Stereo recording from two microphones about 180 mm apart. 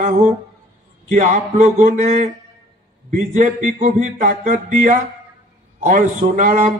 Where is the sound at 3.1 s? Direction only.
45° right (ahead or behind).